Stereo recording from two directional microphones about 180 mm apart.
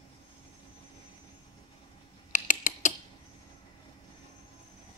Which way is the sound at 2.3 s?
45° left (ahead or behind).